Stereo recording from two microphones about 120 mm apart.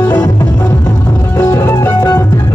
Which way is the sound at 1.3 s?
25° left (ahead or behind).